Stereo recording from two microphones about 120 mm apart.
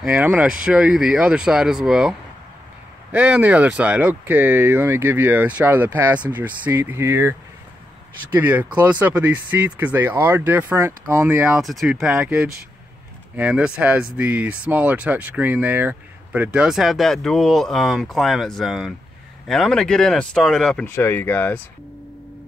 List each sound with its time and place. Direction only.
0.1 s speech: 15° right (ahead or behind)
11.6 s speech: centre (ahead or behind)
20.8 s speech: 20° left (ahead or behind)